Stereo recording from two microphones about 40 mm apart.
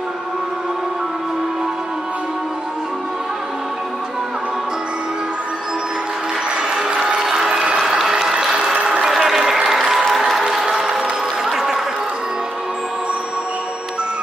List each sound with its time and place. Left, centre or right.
6.7 s music: right
7.2 s applause: centre
9.0 s applause: centre